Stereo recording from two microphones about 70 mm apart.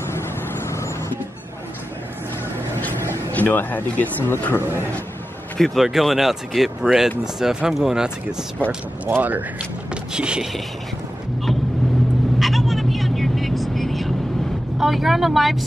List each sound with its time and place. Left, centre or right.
0.1 s vehicle: left
3.3 s speech: left
4.6 s a man's voice: right
5.6 s speech: centre
8.6 s speech: right
10.1 s speech: centre
12.4 s vehicle: centre
14.8 s speech: centre